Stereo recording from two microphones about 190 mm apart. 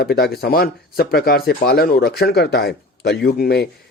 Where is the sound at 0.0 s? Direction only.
55° left (ahead or behind).